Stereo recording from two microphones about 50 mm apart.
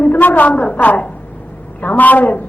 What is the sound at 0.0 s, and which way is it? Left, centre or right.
A woman's voice, left.